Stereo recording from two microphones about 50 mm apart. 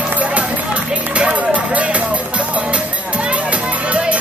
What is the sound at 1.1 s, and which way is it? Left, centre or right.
Music, right.